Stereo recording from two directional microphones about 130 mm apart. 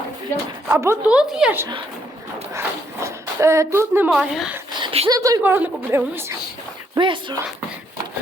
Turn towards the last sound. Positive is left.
turn(degrees=-40)  # may be behind; listen again after turning